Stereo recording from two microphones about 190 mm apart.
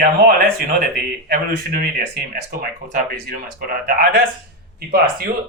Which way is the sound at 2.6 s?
50° right (ahead or behind).